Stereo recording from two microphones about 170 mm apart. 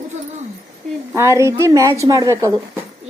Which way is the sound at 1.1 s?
15° right (ahead or behind).